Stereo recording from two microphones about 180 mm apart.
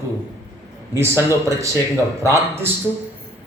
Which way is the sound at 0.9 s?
15° right (ahead or behind).